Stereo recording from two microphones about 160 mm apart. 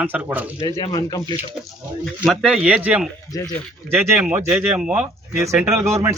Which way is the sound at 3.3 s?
20° left (ahead or behind).